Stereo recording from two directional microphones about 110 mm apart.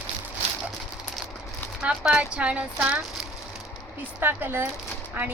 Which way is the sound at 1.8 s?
10° right (ahead or behind).